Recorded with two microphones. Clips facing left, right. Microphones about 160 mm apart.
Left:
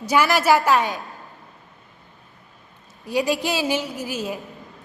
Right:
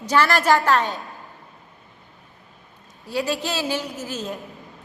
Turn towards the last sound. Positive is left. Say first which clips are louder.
# left 2 dB
turn(degrees=10)  # may be behind; listen again after turning